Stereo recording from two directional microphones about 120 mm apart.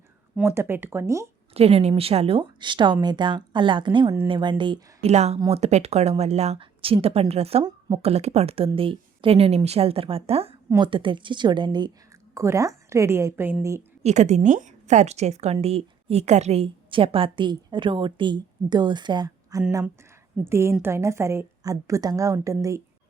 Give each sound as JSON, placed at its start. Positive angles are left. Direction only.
{"t": 0.4, "sound": "a woman's voice", "side_deg": -20}
{"t": 1.5, "sound": "speech", "side_deg": -60}
{"t": 5.0, "sound": "speech", "side_deg": -65}
{"t": 7.6, "sound": "a woman's voice", "side_deg": -30}
{"t": 8.0, "sound": "speech", "side_deg": -60}
{"t": 10.8, "sound": "speech", "side_deg": -45}
{"t": 12.3, "sound": "a woman's voice", "side_deg": -25}
{"t": 14.0, "sound": "a woman's voice", "side_deg": -75}